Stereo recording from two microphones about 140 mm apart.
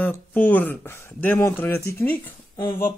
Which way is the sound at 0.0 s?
15° left (ahead or behind).